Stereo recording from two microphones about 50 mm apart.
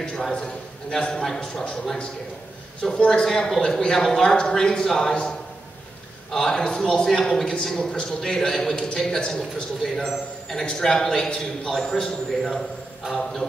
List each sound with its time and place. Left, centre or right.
0.3 s a man's voice: left
6.3 s a man's voice: centre